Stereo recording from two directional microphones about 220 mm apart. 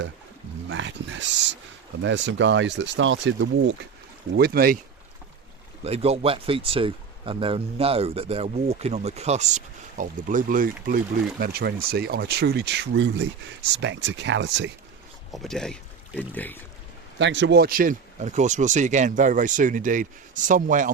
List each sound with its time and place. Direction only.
0.7 s a sound: 55° right (ahead or behind)
2.0 s speech: 55° right (ahead or behind)
4.4 s speech: 45° right (ahead or behind)
5.8 s speech: 30° right (ahead or behind); by 14.7 s 55° right (ahead or behind)
15.3 s speech: centre (ahead or behind)
17.2 s speech: 55° right (ahead or behind); by 20.9 s 35° right (ahead or behind)